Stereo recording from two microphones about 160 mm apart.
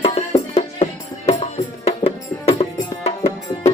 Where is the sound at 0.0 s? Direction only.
40° left (ahead or behind).